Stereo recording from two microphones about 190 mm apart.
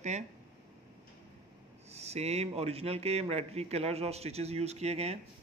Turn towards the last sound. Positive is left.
turn(degrees=-35)  # may be behind; listen again after turning